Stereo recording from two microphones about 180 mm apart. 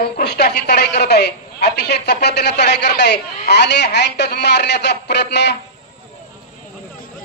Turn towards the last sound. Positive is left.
turn(degrees=70)  # may be behind; listen again after turning